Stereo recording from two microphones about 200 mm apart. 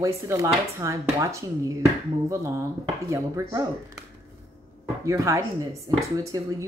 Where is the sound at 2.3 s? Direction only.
15° right (ahead or behind).